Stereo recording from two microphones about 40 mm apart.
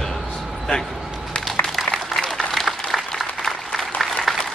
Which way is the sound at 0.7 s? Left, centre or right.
Left.